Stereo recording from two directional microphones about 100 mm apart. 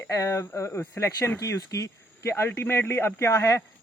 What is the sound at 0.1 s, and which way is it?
Speech, 30° left (ahead or behind).